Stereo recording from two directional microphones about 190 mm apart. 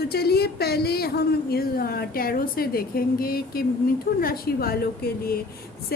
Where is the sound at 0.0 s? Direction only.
55° left (ahead or behind).